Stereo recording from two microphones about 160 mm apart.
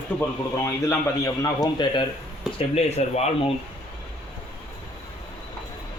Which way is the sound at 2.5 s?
40° left (ahead or behind).